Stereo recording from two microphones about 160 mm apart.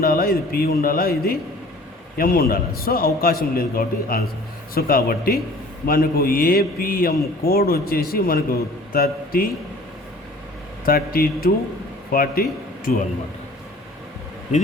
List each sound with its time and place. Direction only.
0.0 s a man's voice: 65° left (ahead or behind)
10.8 s a man's voice: 65° left (ahead or behind)